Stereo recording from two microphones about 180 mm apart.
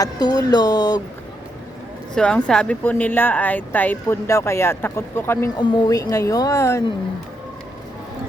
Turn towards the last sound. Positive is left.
turn(degrees=15)  # may be behind; listen again after turning